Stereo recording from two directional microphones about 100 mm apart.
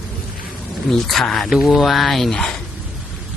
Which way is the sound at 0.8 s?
5° left (ahead or behind).